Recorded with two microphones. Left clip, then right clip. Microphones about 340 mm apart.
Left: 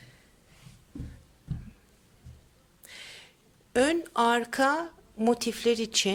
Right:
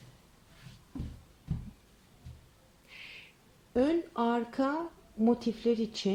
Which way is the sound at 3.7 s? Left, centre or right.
Left.